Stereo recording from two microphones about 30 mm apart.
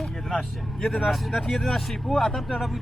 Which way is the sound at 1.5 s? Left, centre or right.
Centre.